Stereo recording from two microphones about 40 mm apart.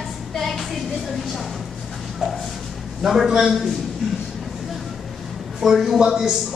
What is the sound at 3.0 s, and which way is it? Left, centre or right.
Speech, centre.